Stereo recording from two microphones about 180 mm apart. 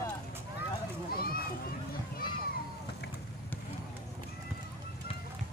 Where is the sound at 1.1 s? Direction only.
55° left (ahead or behind).